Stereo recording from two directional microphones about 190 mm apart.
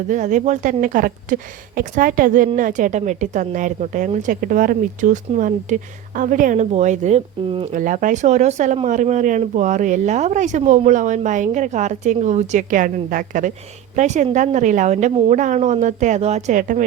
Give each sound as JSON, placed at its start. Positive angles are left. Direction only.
{"t": 0.1, "sound": "a woman's voice", "side_deg": -40}